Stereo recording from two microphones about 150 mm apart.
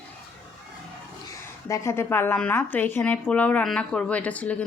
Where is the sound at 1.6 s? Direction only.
20° left (ahead or behind).